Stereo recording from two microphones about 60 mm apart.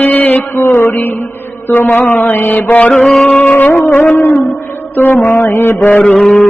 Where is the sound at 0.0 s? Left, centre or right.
Left.